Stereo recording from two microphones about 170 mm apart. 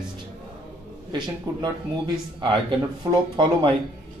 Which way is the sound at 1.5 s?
25° right (ahead or behind).